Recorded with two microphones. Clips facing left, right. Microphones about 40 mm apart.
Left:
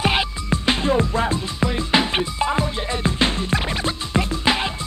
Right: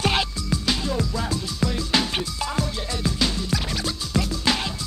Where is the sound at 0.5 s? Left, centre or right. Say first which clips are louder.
Left 5 dB; left.